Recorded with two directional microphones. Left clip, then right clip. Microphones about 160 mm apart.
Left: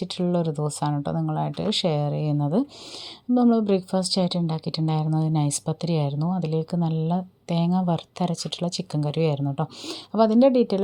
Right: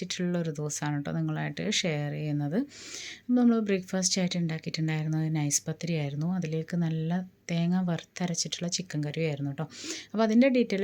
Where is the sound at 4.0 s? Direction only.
25° left (ahead or behind).